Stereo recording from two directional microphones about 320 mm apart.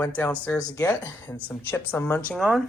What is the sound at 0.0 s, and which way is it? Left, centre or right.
Speech, centre.